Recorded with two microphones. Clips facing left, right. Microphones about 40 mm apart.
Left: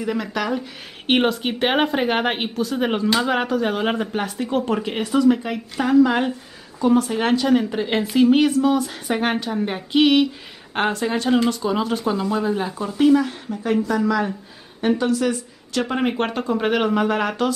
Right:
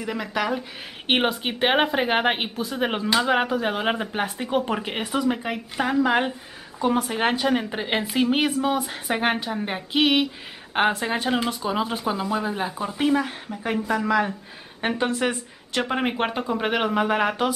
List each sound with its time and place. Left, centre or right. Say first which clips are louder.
0.0 s a woman's voice: left 2 dB; centre
14.8 s a woman's voice: left 4 dB; right
15.8 s a woman's voice: left 2 dB; centre